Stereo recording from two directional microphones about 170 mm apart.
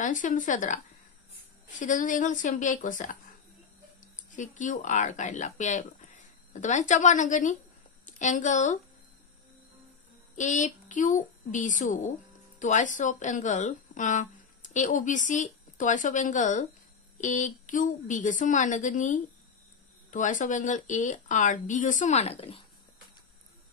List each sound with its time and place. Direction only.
0.0 s speech: 50° left (ahead or behind)
1.8 s a woman's voice: 50° left (ahead or behind)
10.3 s speech: 45° left (ahead or behind)